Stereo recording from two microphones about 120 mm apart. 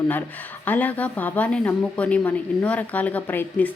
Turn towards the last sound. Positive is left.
turn(degrees=15)  # may be behind; listen again after turning